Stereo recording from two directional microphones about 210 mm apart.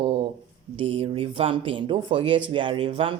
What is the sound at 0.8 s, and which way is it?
Speech, 25° right (ahead or behind).